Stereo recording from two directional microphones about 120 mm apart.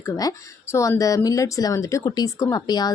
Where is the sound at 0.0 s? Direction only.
25° left (ahead or behind).